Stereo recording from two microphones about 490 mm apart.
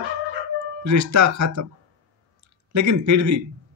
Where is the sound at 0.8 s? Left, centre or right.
Right.